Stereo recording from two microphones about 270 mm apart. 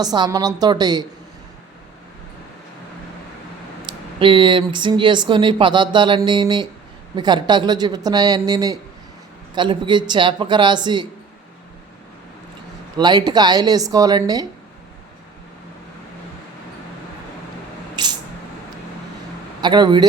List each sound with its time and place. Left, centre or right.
0.0 s speech: centre
3.8 s speech: centre
13.0 s speech: centre
18.0 s spray: centre
19.6 s speech: centre